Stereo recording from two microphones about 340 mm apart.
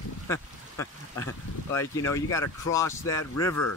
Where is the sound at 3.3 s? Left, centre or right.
Left.